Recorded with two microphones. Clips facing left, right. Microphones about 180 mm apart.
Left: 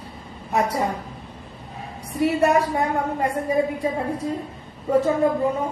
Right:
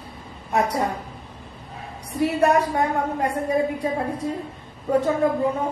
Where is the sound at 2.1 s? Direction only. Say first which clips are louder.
Even; centre (ahead or behind).